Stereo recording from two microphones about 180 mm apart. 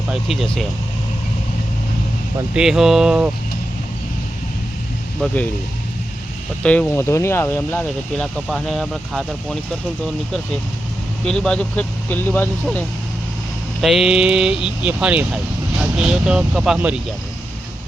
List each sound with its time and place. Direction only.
0.1 s speech: centre (ahead or behind)
2.5 s speech: 5° right (ahead or behind)
5.2 s speech: 10° left (ahead or behind)
6.6 s speech: 10° left (ahead or behind)
11.3 s speech: 5° left (ahead or behind)
13.8 s speech: centre (ahead or behind)